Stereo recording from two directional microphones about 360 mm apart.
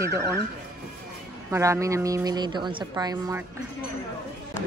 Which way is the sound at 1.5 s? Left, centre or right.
Centre.